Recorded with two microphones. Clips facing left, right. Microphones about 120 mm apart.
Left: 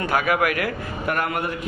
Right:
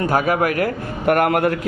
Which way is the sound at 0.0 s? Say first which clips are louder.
Right 3 dB; 40° right (ahead or behind).